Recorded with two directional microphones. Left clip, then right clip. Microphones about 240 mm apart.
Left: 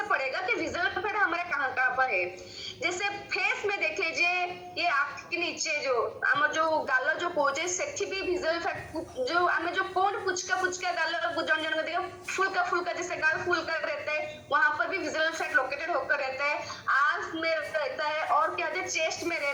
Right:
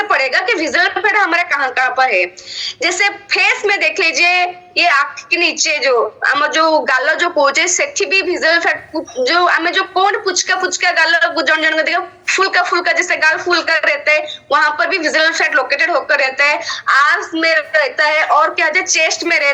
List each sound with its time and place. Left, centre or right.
0.1 s a woman's voice: right